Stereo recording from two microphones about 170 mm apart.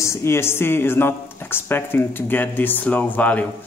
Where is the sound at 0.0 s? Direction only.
15° left (ahead or behind).